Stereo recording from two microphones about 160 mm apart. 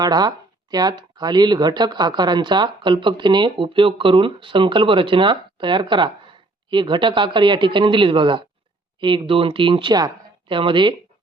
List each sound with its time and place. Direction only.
0.0 s speech: 25° right (ahead or behind)